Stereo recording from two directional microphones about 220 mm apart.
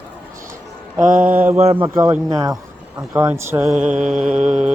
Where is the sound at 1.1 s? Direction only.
35° right (ahead or behind).